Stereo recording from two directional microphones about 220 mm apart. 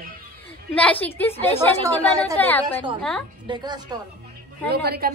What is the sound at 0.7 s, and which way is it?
A woman's voice, 5° left (ahead or behind).